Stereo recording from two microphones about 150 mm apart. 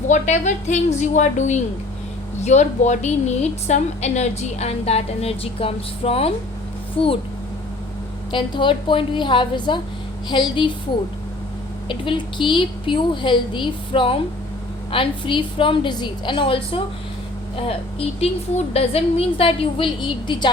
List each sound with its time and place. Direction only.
0.1 s a woman's voice: 55° left (ahead or behind)
8.3 s a woman's voice: 35° left (ahead or behind)
11.9 s a woman's voice: 35° left (ahead or behind)
18.2 s a woman's voice: 45° left (ahead or behind)